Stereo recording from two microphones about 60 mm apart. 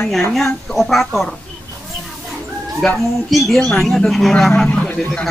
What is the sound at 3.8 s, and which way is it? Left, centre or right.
Speech, centre.